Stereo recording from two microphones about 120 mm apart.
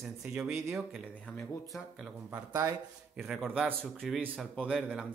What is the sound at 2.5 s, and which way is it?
Speech, 30° right (ahead or behind).